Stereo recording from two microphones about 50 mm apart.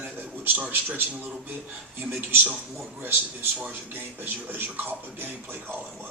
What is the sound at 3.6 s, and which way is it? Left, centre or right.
Speech, right.